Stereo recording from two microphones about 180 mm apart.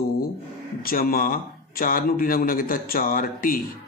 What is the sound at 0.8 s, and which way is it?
Mantra, 55° left (ahead or behind).